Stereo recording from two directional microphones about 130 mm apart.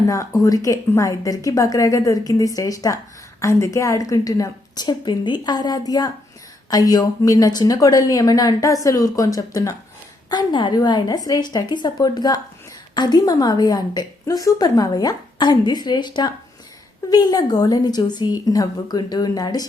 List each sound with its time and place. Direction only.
0.1 s a woman's voice: 25° left (ahead or behind)